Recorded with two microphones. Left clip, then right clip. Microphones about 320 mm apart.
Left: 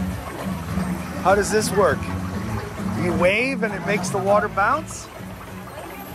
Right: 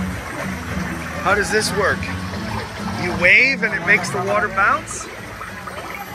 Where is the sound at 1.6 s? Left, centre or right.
Centre.